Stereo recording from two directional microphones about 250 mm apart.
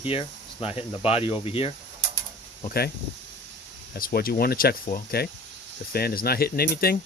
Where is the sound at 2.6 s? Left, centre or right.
Left.